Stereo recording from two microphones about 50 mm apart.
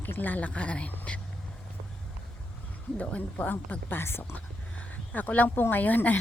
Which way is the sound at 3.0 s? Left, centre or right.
Left.